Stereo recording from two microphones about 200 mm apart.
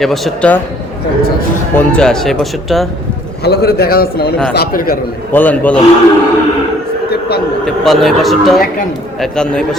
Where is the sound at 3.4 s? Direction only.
50° left (ahead or behind).